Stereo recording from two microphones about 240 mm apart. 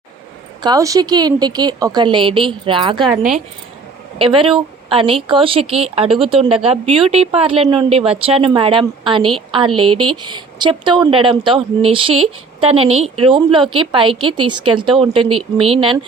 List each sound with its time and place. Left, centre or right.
0.6 s a woman's voice: centre
4.2 s speech: right
12.1 s speech: right
12.6 s speech: right